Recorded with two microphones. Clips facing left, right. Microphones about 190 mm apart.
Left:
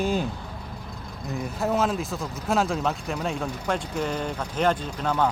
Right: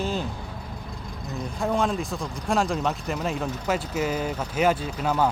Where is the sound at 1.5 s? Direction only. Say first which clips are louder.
Even; 5° left (ahead or behind).